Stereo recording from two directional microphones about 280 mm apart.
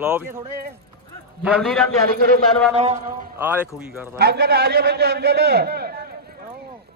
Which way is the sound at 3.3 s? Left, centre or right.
Centre.